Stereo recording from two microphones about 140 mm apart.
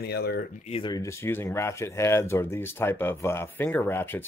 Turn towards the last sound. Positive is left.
turn(degrees=15)  # may be behind; listen again after turning